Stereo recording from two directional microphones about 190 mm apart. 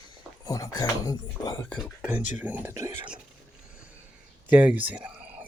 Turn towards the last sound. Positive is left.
turn(degrees=-5)  # may be behind; listen again after turning